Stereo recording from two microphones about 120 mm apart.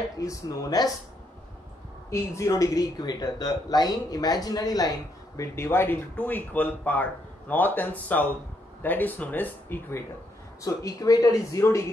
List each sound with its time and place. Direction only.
0.2 s speech: 30° left (ahead or behind)
2.0 s speech: 25° left (ahead or behind)
5.4 s speech: 20° left (ahead or behind)